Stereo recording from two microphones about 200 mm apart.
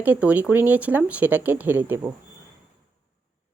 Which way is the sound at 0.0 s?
10° right (ahead or behind).